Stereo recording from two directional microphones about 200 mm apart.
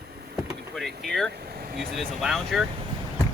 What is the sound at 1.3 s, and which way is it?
Speech, 55° right (ahead or behind).